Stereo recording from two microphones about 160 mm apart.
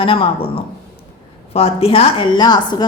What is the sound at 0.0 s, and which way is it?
A woman's voice, 35° left (ahead or behind).